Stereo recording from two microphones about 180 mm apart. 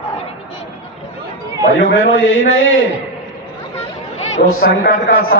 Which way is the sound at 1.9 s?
90° left.